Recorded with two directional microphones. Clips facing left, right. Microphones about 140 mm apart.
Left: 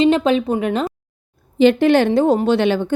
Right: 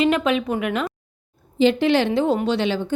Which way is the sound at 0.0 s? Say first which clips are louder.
Left 4 dB; 30° left (ahead or behind).